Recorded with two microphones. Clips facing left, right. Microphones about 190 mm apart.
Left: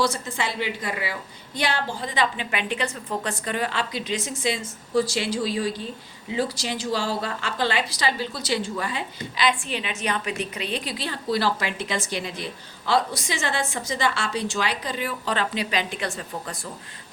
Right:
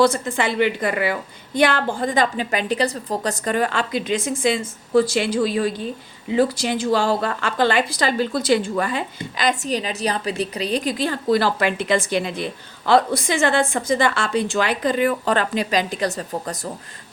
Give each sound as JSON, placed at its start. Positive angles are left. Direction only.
{"t": 0.0, "sound": "a woman's voice", "side_deg": -55}